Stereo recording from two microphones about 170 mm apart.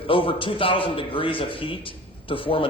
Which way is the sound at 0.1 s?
30° left (ahead or behind).